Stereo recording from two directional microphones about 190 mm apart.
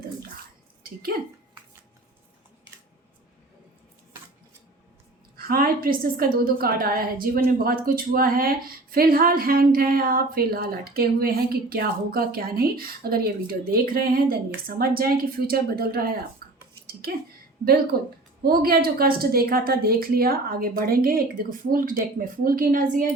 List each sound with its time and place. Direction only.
5.4 s a woman's voice: 50° right (ahead or behind)
16.8 s a sound: 55° right (ahead or behind)
17.9 s a woman's voice: 50° right (ahead or behind)